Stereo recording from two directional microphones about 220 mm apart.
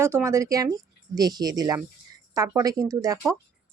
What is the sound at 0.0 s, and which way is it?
Speech, 10° right (ahead or behind).